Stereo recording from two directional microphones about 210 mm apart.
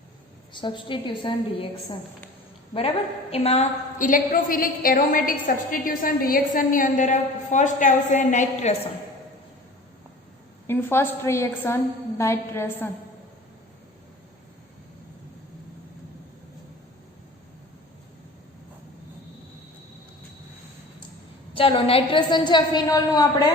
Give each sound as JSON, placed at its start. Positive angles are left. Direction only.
{"t": 0.5, "sound": "a woman's voice", "side_deg": 20}
{"t": 3.3, "sound": "a woman's voice", "side_deg": 30}
{"t": 10.7, "sound": "a woman's voice", "side_deg": 10}
{"t": 21.5, "sound": "a woman's voice", "side_deg": 25}